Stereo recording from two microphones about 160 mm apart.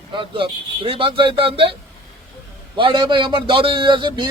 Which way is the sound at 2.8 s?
30° right (ahead or behind).